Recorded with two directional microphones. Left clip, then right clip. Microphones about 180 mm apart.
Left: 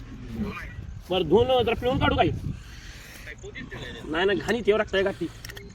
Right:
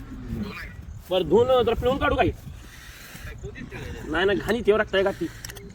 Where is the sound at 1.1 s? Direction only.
15° left (ahead or behind).